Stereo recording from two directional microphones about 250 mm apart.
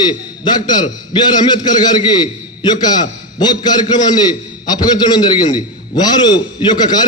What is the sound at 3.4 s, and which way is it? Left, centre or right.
A man's voice, centre.